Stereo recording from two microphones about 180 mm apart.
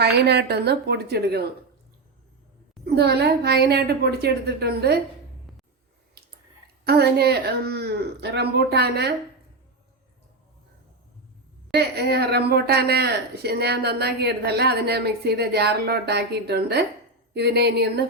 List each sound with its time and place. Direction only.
0.0 s a woman's voice: 65° right (ahead or behind)
2.8 s a woman's voice: 65° right (ahead or behind)
6.2 s drip: 65° right (ahead or behind)
6.8 s a woman's voice: 65° right (ahead or behind)
11.7 s a woman's voice: 65° right (ahead or behind)